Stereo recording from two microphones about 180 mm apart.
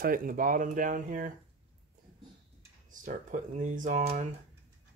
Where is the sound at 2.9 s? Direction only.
45° right (ahead or behind).